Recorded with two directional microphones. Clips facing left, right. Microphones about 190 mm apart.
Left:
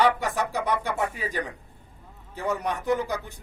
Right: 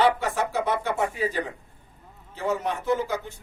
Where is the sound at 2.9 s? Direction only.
15° left (ahead or behind).